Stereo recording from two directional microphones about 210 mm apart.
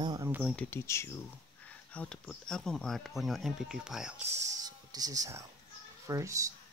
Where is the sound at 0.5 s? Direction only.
10° left (ahead or behind); by 4.1 s 5° right (ahead or behind).